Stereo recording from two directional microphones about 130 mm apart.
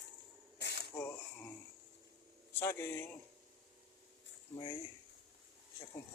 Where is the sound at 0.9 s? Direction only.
15° left (ahead or behind).